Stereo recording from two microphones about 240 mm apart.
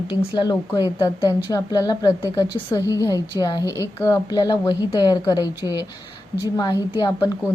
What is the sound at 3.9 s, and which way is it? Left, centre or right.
A woman's voice, centre.